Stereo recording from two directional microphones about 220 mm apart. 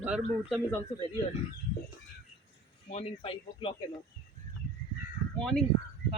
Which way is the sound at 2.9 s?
25° left (ahead or behind).